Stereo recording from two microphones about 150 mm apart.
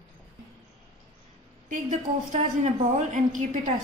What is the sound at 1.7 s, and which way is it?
A woman's voice, 55° right (ahead or behind).